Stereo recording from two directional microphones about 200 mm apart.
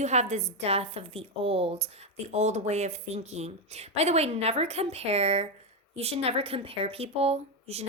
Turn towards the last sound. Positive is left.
turn(degrees=-30)  # may be behind; listen again after turning